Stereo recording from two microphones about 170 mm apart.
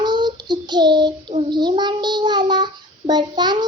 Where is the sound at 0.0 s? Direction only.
25° right (ahead or behind).